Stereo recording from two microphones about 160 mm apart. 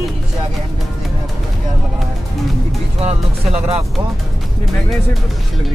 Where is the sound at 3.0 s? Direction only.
40° right (ahead or behind).